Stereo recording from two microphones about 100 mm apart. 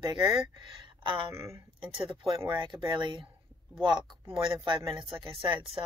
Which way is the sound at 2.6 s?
55° right (ahead or behind).